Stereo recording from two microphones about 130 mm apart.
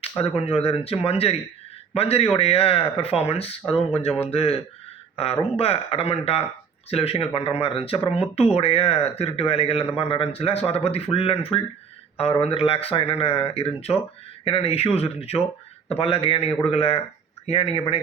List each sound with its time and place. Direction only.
0.2 s speech: 50° left (ahead or behind)